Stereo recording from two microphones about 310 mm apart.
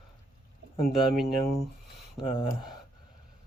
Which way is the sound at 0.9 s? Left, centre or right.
Centre.